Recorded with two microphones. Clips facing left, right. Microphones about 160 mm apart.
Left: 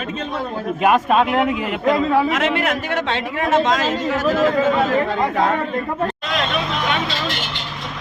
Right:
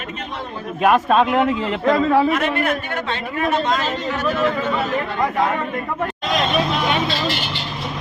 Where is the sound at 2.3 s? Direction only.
90° left.